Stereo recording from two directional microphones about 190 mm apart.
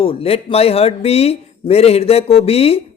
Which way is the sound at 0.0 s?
30° left (ahead or behind).